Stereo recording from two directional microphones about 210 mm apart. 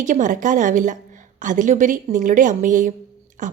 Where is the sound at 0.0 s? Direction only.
35° right (ahead or behind).